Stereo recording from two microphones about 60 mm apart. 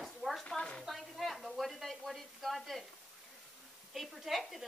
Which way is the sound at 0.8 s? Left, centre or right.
Centre.